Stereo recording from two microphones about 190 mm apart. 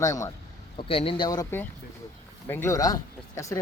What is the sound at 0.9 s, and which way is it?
Speech, 30° left (ahead or behind).